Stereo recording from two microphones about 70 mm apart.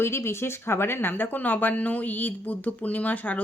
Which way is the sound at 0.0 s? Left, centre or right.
Left.